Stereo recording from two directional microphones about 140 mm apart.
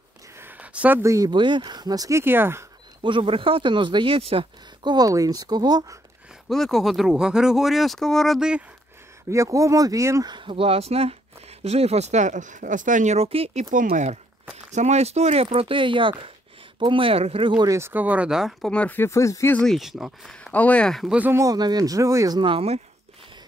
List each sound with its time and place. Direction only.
0.4 s a sound: 10° right (ahead or behind)
1.3 s speech: 35° right (ahead or behind); by 2.6 s 15° right (ahead or behind)
3.0 s speech: 40° right (ahead or behind)
6.5 s speech: centre (ahead or behind)
9.3 s speech: 20° right (ahead or behind)
10.3 s speech: 40° right (ahead or behind)
13.7 s speech: 75° right (ahead or behind)
14.7 s speech: 55° right (ahead or behind); by 17.6 s 35° right (ahead or behind)
17.6 s speech: 20° right (ahead or behind); by 18.7 s 5° right (ahead or behind)
18.7 s speech: 10° left (ahead or behind)
19.6 s speech: centre (ahead or behind)
20.5 s speech: 10° left (ahead or behind)
21.2 s speech: 20° right (ahead or behind); by 22.8 s 40° right (ahead or behind)